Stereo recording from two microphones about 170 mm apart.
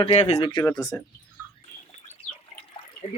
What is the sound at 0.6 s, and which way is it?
Speech, 20° left (ahead or behind).